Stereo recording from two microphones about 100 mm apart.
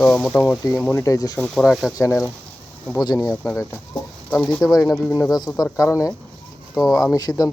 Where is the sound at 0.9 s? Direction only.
30° left (ahead or behind).